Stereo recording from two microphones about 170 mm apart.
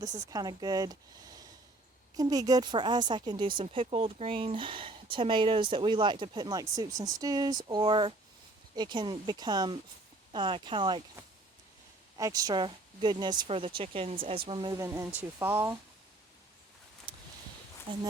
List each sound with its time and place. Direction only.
0.0 s speech: 20° right (ahead or behind)
2.1 s speech: 20° right (ahead or behind)
12.1 s speech: 20° right (ahead or behind)
17.1 s a sound: 30° right (ahead or behind)
17.9 s speech: 30° right (ahead or behind)